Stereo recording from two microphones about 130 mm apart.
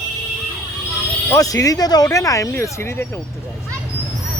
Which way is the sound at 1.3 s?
25° left (ahead or behind).